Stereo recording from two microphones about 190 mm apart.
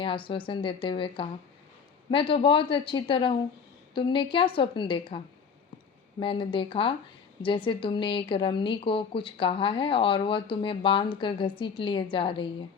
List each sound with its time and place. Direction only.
0.0 s speech: 25° left (ahead or behind)